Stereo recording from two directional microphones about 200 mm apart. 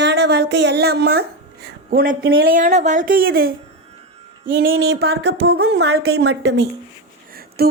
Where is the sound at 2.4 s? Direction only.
40° right (ahead or behind).